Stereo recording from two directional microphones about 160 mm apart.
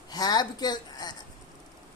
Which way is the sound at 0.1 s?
25° left (ahead or behind).